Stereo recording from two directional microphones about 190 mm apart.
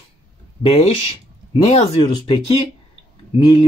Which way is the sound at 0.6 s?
30° left (ahead or behind).